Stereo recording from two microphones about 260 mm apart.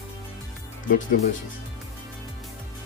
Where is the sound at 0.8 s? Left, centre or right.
Left.